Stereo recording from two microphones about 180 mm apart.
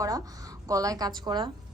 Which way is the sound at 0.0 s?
20° right (ahead or behind).